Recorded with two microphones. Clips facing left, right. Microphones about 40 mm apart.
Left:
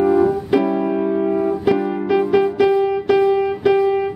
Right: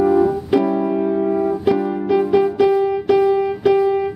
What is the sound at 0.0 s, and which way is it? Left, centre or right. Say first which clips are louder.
Music: even; centre.